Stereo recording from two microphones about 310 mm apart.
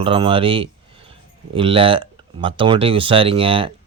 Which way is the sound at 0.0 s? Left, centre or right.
Centre.